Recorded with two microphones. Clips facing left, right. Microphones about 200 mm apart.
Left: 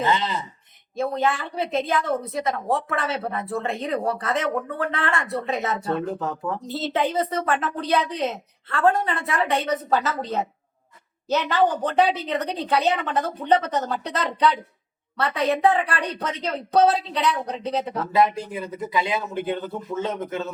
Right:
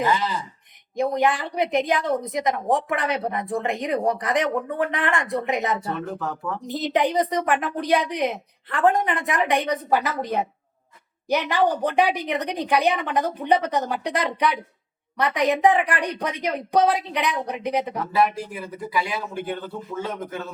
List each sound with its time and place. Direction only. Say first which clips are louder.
0.0 s speech: even; 25° left (ahead or behind)
0.9 s a woman's voice: right 2 dB; 15° right (ahead or behind)
5.8 s speech: left 3 dB; 25° left (ahead or behind)
6.7 s a woman's voice: right 3 dB; 15° right (ahead or behind)
18.1 s speech: left 2 dB; 20° left (ahead or behind)